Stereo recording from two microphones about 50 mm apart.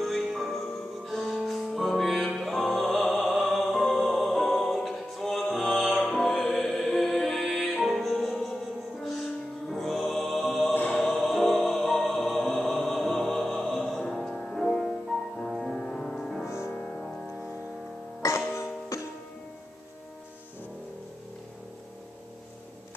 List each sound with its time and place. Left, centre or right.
0.0 s music: centre
9.7 s music: centre
10.7 s choir: left
11.1 s music: centre
16.4 s music: left
18.5 s music: left